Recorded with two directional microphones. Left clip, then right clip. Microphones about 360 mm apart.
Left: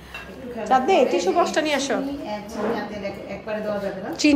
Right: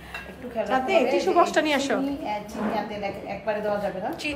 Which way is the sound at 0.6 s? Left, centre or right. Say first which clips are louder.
Left 5 dB; centre.